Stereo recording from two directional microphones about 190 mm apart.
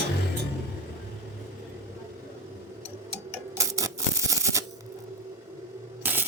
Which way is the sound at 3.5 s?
15° right (ahead or behind).